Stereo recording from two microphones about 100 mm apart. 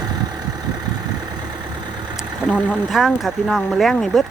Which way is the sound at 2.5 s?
15° left (ahead or behind).